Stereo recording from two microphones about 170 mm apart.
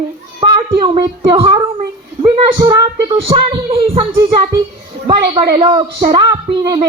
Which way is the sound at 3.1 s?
35° right (ahead or behind).